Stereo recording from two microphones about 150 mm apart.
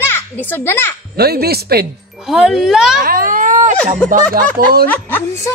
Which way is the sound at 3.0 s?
70° right (ahead or behind).